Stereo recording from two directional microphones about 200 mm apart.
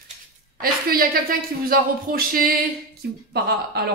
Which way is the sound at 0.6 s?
50° right (ahead or behind).